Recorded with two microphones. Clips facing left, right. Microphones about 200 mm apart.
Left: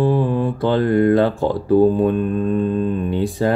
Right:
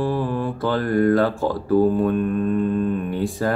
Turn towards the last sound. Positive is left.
turn(degrees=25)  # may be behind; listen again after turning